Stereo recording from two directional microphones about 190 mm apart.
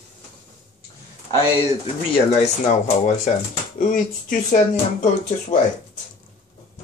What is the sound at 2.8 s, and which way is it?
Speech, 40° left (ahead or behind).